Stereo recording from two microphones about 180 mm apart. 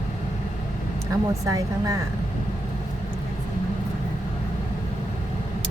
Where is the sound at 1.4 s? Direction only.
20° right (ahead or behind).